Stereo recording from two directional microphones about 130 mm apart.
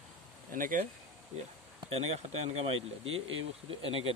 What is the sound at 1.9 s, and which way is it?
Speech, 55° right (ahead or behind).